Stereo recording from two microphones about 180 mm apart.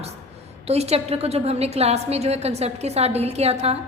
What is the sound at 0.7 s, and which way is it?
A woman's voice, 35° right (ahead or behind).